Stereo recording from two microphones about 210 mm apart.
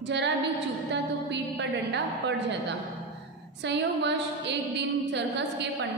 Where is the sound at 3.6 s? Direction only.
55° right (ahead or behind).